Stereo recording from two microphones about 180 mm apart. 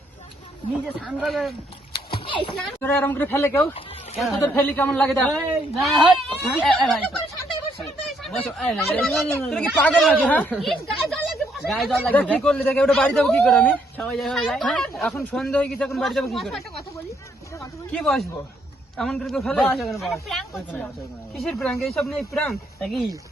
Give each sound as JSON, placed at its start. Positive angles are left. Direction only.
{"t": 1.0, "sound": "speech", "side_deg": 0}
{"t": 2.2, "sound": "a sound", "side_deg": 25}
{"t": 2.8, "sound": "speech", "side_deg": 10}
{"t": 8.0, "sound": "speech", "side_deg": 0}
{"t": 17.9, "sound": "speech", "side_deg": 0}